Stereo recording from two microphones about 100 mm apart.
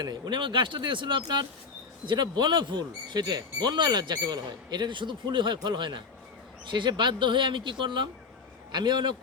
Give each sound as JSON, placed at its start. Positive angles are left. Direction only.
{"t": 0.0, "sound": "speech", "side_deg": -50}